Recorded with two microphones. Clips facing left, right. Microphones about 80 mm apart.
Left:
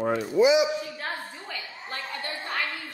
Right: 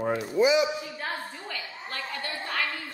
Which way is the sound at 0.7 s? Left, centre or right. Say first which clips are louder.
Left 2 dB; centre.